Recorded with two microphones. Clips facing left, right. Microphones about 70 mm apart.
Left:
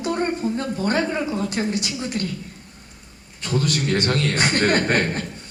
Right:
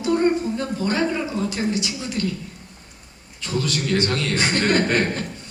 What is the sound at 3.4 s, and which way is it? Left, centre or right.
A woman's voice, left.